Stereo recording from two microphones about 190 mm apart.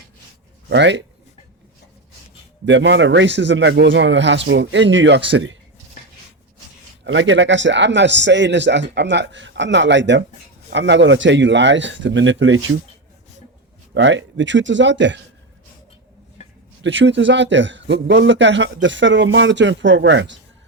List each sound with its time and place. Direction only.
0.7 s a man's voice: 70° right (ahead or behind)
2.6 s a man's voice: 70° right (ahead or behind)
7.0 s a man's voice: 75° right (ahead or behind)
13.9 s a man's voice: 75° right (ahead or behind)
16.8 s a man's voice: 70° right (ahead or behind)